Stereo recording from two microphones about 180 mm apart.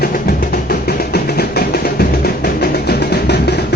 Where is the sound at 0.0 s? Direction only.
55° left (ahead or behind).